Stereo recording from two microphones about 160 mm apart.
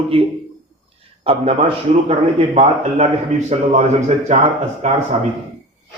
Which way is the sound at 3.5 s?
40° right (ahead or behind).